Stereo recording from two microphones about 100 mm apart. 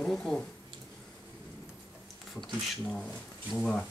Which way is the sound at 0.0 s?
5° left (ahead or behind).